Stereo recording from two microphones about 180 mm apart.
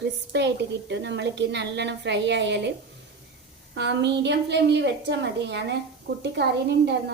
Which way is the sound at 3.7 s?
75° right (ahead or behind).